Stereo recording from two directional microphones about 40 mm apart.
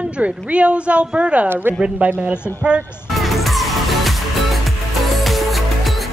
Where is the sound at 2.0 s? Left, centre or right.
Right.